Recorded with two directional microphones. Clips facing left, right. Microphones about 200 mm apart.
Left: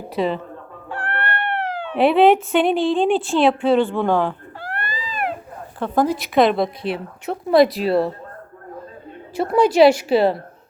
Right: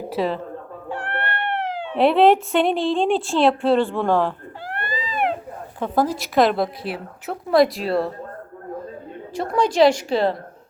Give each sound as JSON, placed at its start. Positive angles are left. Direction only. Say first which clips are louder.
{"t": 0.1, "sound": "a woman's voice", "louder": "left 2 dB", "side_deg": 0}
{"t": 0.9, "sound": "cat", "louder": "left 1 dB", "side_deg": -20}
{"t": 2.0, "sound": "a woman's voice", "louder": "left 1 dB", "side_deg": 0}
{"t": 4.6, "sound": "baby cry", "louder": "right 1 dB", "side_deg": -20}
{"t": 5.8, "sound": "a woman's voice", "louder": "left 2 dB", "side_deg": -5}
{"t": 9.3, "sound": "a woman's voice", "louder": "left 4 dB", "side_deg": 5}